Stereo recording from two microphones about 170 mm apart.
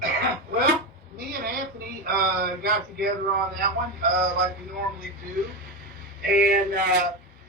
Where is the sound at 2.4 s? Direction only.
65° right (ahead or behind).